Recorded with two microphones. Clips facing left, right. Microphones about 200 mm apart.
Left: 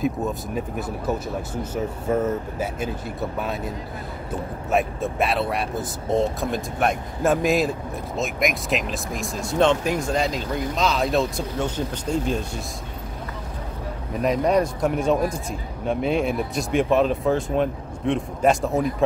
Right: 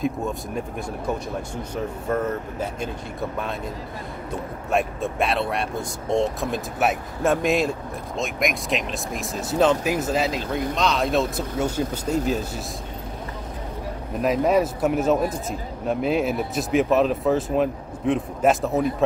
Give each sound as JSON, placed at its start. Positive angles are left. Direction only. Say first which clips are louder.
{"t": 0.0, "sound": "speech", "louder": "left 1 dB", "side_deg": 0}
{"t": 4.6, "sound": "speech", "louder": "left 1 dB", "side_deg": 0}
{"t": 14.2, "sound": "speech", "louder": "even", "side_deg": -5}